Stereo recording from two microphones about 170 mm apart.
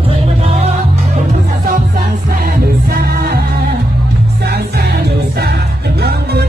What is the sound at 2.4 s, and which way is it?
Music, 55° right (ahead or behind).